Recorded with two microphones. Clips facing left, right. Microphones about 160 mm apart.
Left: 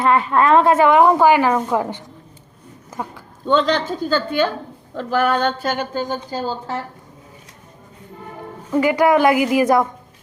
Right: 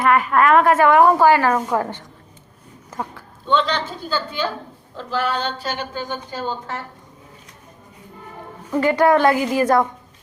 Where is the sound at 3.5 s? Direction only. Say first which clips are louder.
Left 3 dB; 45° left (ahead or behind).